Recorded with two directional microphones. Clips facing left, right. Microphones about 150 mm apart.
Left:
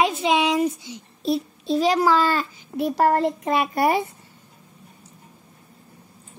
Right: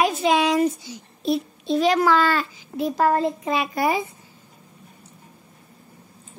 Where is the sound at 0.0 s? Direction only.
20° left (ahead or behind).